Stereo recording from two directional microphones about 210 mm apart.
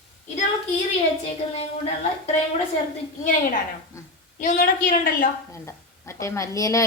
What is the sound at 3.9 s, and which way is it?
Speech, 15° left (ahead or behind).